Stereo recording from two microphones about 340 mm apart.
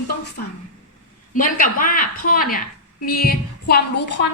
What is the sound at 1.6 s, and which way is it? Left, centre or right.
A woman's voice, left.